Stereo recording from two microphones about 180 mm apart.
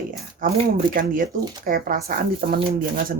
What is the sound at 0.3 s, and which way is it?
Speech, 50° right (ahead or behind).